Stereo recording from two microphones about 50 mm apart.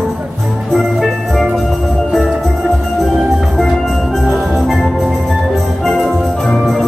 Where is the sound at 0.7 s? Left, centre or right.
Centre.